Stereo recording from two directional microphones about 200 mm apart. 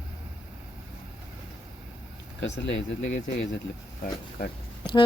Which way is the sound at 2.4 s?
65° left (ahead or behind).